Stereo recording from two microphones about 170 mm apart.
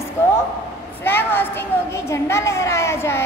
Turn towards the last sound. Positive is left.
turn(degrees=15)  # may be behind; listen again after turning